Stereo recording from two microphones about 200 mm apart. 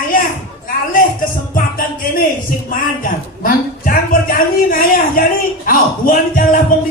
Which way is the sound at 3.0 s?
45° left (ahead or behind).